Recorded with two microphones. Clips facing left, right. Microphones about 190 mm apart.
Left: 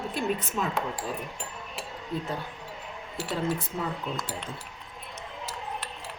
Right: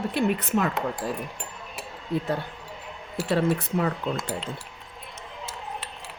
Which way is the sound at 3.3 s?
70° right (ahead or behind).